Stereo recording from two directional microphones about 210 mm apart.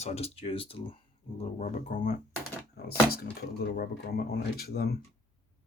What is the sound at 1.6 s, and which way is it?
Speech, 40° left (ahead or behind).